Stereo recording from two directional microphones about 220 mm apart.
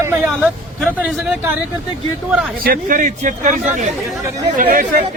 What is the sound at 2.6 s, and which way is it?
Speech, 35° right (ahead or behind).